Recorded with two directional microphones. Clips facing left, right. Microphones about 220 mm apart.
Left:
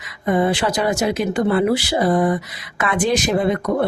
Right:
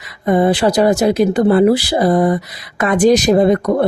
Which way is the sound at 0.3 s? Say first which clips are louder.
Right 5 dB; 35° right (ahead or behind).